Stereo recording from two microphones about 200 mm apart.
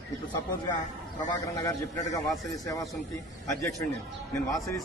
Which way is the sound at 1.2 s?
20° left (ahead or behind).